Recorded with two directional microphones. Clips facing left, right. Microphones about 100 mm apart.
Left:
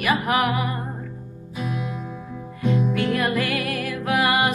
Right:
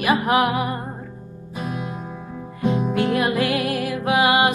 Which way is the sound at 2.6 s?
35° right (ahead or behind).